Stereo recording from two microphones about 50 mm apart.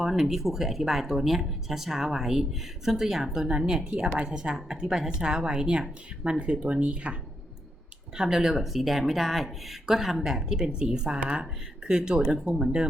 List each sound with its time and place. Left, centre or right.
0.0 s a woman's voice: centre